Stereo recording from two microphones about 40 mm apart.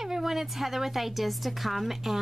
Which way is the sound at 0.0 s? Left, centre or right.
Centre.